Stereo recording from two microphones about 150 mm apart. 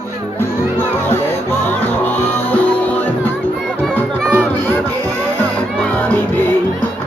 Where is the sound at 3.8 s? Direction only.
5° left (ahead or behind).